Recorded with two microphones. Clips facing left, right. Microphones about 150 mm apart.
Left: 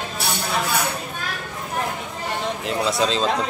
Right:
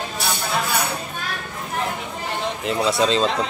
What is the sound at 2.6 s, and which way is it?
Speech, centre (ahead or behind).